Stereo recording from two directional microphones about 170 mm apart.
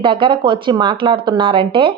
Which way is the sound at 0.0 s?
30° right (ahead or behind).